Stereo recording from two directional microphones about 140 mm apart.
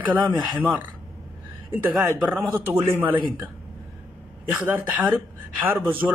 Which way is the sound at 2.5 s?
15° right (ahead or behind).